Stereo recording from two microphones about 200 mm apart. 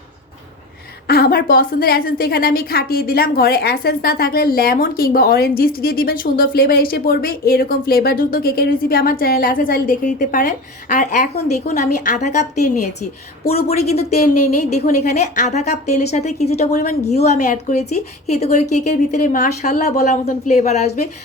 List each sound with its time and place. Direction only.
1.0 s a woman's voice: 50° left (ahead or behind); by 21.0 s 35° left (ahead or behind)